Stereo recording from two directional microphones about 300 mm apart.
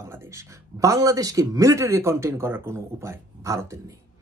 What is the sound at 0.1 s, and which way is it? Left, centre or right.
Speech, centre.